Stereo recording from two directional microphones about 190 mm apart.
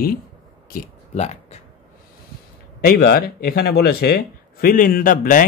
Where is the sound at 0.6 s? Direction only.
40° left (ahead or behind).